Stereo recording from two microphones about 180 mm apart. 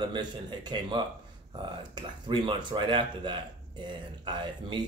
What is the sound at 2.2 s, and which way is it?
Speech, 25° right (ahead or behind).